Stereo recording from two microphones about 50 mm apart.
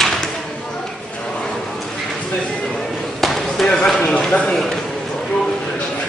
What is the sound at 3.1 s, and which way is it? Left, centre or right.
Basketball bounce, centre.